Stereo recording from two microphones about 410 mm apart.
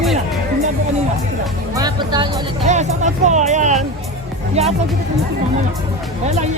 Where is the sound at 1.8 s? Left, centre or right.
Centre.